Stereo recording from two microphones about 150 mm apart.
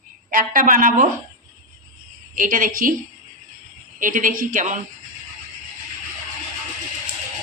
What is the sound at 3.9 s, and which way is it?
Speech, 60° right (ahead or behind).